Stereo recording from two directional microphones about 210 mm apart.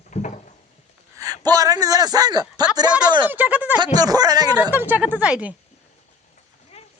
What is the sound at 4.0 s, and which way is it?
A man's voice, 20° right (ahead or behind).